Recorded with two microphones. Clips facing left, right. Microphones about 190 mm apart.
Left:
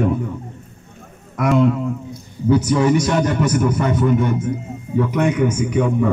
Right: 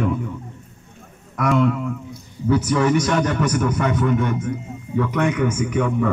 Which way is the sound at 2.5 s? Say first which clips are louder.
Left 2 dB; 15° left (ahead or behind).